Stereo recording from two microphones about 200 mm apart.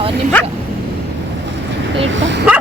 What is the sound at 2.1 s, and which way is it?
Speech, 65° right (ahead or behind).